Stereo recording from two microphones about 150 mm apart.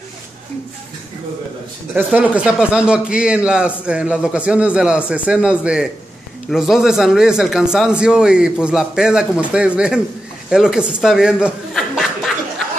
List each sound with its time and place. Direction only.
2.0 s a man's voice: 10° right (ahead or behind)